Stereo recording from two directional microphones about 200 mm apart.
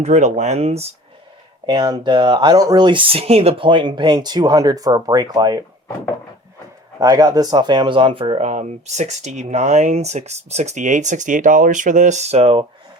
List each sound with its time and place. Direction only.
0.0 s speech: 35° right (ahead or behind); by 5.6 s 20° right (ahead or behind)
7.0 s speech: 20° right (ahead or behind)